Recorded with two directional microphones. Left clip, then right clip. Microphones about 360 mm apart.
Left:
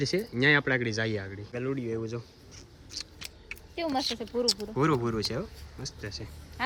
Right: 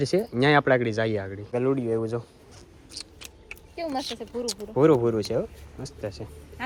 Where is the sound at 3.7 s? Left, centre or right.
Left.